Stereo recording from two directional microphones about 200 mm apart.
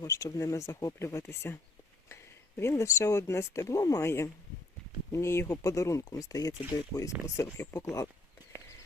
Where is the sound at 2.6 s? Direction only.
15° left (ahead or behind).